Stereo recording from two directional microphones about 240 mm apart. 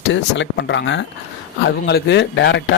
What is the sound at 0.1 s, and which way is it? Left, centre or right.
Speech, left.